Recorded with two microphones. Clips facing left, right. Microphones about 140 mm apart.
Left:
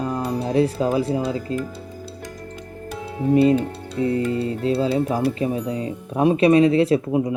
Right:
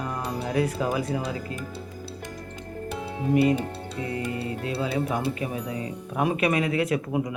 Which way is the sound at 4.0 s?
30° left (ahead or behind).